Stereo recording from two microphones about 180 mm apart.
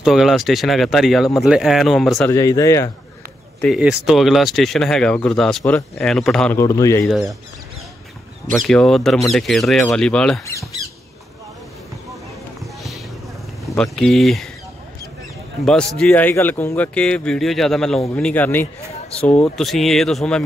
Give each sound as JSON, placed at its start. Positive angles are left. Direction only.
{"t": 0.0, "sound": "speech", "side_deg": 0}
{"t": 2.2, "sound": "speech", "side_deg": 15}
{"t": 3.6, "sound": "speech", "side_deg": -5}
{"t": 6.6, "sound": "speech", "side_deg": 15}
{"t": 7.1, "sound": "speech", "side_deg": 0}
{"t": 8.5, "sound": "speech", "side_deg": 5}
{"t": 13.7, "sound": "speech", "side_deg": 5}
{"t": 16.0, "sound": "speech", "side_deg": 10}